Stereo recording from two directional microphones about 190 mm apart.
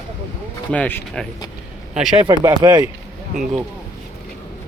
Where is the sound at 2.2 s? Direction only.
20° right (ahead or behind).